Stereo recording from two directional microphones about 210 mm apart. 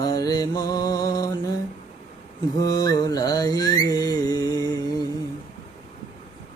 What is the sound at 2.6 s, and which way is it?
Mantra, 20° left (ahead or behind).